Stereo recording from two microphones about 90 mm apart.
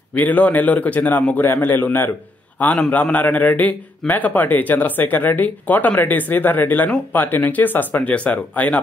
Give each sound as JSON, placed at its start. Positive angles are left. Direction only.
{"t": 0.1, "sound": "a man's voice", "side_deg": 20}